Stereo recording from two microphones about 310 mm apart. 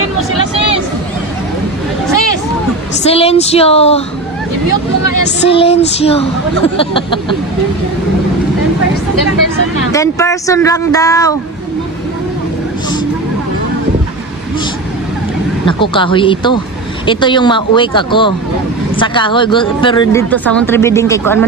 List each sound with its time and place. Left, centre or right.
3.1 s speech: centre
5.5 s speech: centre
9.9 s speech: centre
15.6 s speech: centre